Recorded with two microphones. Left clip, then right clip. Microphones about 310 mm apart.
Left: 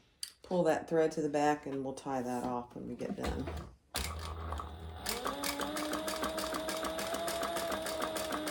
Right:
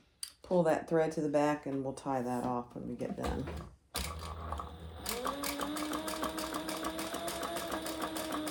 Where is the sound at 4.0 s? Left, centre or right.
Centre.